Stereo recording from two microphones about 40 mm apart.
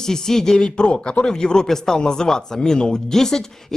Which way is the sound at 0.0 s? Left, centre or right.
Centre.